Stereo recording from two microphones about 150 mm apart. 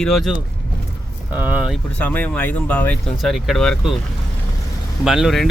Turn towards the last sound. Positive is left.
turn(degrees=0)  # may be behind; listen again after turning